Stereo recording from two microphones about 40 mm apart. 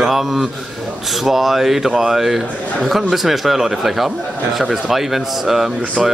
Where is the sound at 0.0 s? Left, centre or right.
Centre.